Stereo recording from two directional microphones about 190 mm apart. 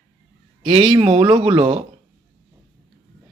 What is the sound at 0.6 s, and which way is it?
Speech, 30° right (ahead or behind).